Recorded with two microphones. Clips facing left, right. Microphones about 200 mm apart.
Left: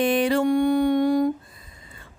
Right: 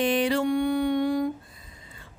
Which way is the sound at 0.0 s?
50° left (ahead or behind).